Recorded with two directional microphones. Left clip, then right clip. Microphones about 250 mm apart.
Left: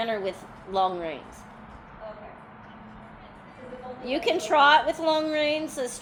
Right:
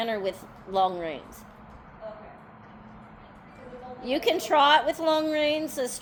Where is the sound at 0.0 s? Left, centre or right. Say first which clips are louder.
Even; right.